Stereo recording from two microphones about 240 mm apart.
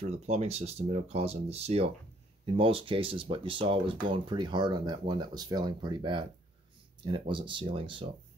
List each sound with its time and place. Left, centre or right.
0.0 s speech: right